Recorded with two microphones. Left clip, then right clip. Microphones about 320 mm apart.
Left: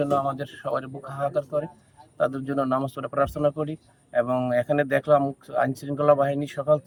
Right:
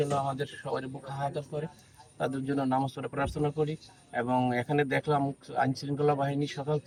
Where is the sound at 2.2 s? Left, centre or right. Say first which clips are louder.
Left 7 dB; centre.